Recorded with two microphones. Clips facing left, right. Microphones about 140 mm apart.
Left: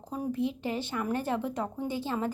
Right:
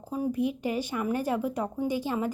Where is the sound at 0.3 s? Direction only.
15° right (ahead or behind).